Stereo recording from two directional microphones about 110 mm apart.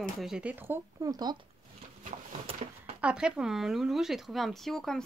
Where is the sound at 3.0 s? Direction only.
10° right (ahead or behind).